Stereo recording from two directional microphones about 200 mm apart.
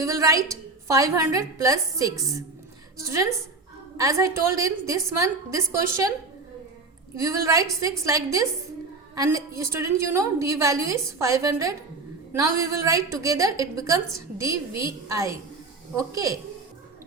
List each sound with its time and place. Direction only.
0.0 s a woman's voice: 15° right (ahead or behind)
7.2 s a woman's voice: 15° right (ahead or behind)